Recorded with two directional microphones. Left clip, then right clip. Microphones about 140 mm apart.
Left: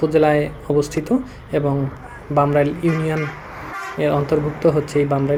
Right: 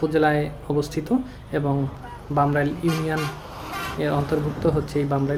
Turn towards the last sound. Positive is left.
turn(degrees=20)  # may be behind; listen again after turning